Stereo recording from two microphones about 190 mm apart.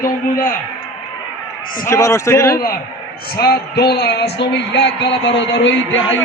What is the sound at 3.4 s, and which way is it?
A man's voice, 60° left (ahead or behind).